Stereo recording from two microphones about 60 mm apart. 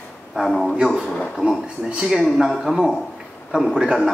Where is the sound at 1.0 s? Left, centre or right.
Centre.